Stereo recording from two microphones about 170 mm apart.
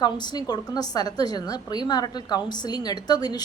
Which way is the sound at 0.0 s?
25° left (ahead or behind).